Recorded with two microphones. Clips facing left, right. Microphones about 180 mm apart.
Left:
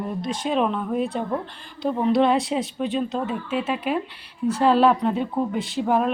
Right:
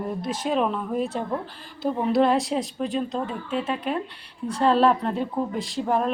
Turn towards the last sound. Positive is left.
turn(degrees=0)  # may be behind; listen again after turning